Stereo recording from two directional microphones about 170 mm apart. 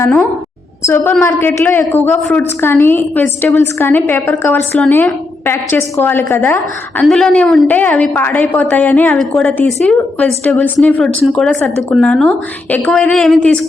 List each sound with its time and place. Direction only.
0.0 s a woman's voice: 10° left (ahead or behind)